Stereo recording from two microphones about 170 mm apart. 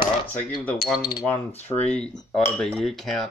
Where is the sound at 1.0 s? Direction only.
25° left (ahead or behind).